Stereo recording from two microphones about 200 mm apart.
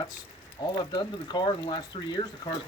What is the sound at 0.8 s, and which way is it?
Speech, 20° left (ahead or behind).